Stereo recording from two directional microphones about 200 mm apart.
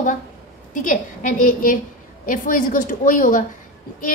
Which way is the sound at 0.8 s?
40° left (ahead or behind).